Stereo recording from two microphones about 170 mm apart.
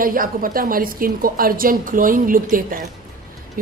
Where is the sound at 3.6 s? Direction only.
55° right (ahead or behind).